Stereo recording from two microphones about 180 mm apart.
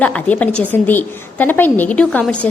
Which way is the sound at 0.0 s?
10° left (ahead or behind).